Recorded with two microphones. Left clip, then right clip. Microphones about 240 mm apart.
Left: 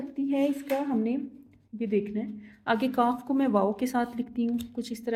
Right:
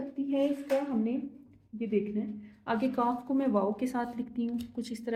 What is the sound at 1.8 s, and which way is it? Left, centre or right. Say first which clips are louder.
A woman's voice: left 3 dB; left.